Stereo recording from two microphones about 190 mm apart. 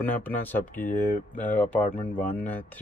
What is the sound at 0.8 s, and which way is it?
Speech, 45° left (ahead or behind).